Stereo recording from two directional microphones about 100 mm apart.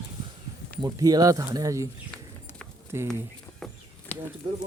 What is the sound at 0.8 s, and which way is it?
Speech, 40° right (ahead or behind).